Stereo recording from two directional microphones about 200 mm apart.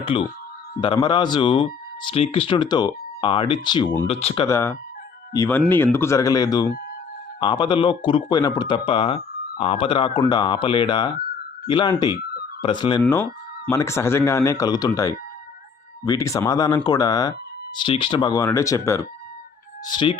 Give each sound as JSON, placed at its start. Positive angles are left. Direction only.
{"t": 0.0, "sound": "speech", "side_deg": 25}
{"t": 4.4, "sound": "speech", "side_deg": 15}